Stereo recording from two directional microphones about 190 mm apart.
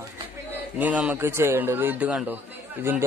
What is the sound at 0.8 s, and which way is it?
A man's voice, 10° right (ahead or behind).